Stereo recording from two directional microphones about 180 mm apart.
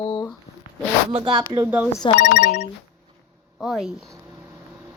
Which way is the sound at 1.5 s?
15° right (ahead or behind).